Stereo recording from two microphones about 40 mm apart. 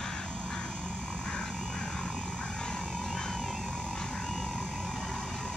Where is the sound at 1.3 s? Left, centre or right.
Centre.